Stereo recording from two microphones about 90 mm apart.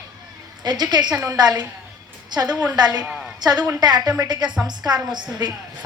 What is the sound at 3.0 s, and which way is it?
Speech, 10° right (ahead or behind).